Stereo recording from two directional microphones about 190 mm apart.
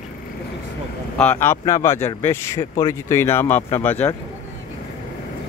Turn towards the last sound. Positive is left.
turn(degrees=10)  # may be behind; listen again after turning